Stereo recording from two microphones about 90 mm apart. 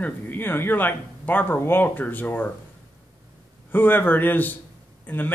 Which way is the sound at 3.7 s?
20° left (ahead or behind).